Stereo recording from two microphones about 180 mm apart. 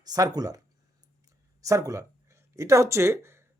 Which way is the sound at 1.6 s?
20° right (ahead or behind).